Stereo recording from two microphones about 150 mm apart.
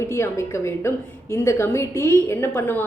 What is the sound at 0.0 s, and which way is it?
A woman's voice, 15° left (ahead or behind).